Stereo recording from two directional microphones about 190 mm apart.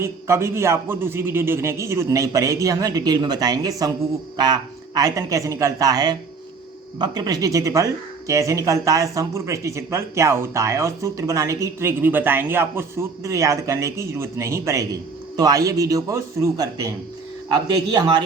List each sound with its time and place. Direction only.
0.0 s speech: 15° right (ahead or behind)